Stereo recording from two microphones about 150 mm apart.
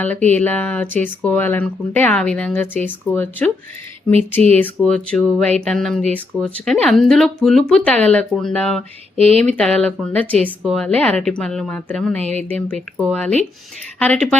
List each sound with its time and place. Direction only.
0.0 s speech: 10° left (ahead or behind)
4.4 s speech: 45° right (ahead or behind)
4.6 s speech: 5° left (ahead or behind)
9.1 s speech: 40° right (ahead or behind)
9.6 s speech: 5° left (ahead or behind)
12.2 s speech: 45° right (ahead or behind)
12.5 s speech: 10° left (ahead or behind)